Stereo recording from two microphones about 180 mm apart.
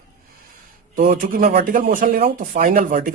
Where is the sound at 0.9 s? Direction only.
55° right (ahead or behind).